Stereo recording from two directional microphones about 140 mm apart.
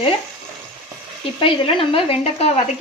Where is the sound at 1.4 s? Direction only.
40° left (ahead or behind).